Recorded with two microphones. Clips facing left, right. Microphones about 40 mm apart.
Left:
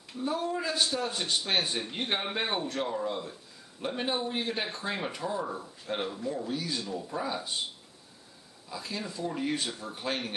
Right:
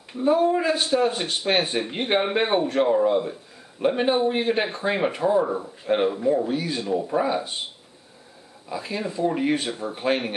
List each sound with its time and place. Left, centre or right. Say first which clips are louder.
0.1 s speech: right 12 dB; right
8.6 s speech: right 8 dB; right